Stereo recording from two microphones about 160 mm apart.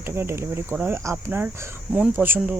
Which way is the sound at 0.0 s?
15° right (ahead or behind).